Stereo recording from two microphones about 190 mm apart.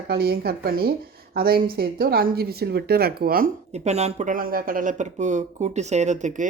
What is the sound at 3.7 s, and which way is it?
Speech, 35° right (ahead or behind).